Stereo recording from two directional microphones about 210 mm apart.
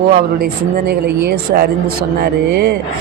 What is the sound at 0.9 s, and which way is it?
Speech, 50° right (ahead or behind).